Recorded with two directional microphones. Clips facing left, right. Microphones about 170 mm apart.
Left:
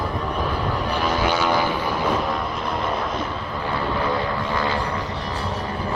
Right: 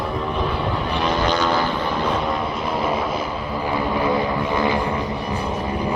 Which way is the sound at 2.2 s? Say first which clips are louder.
Right 2 dB; centre (ahead or behind).